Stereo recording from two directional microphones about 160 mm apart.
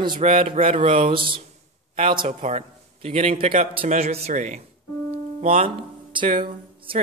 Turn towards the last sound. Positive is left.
turn(degrees=-35)  # may be behind; listen again after turning